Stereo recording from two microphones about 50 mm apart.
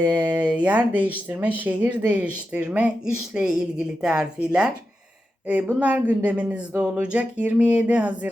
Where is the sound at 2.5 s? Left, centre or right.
Right.